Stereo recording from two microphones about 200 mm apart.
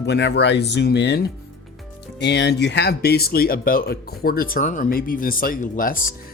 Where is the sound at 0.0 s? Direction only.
60° left (ahead or behind).